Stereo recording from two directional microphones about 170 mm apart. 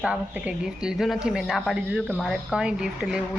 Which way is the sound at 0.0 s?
5° right (ahead or behind).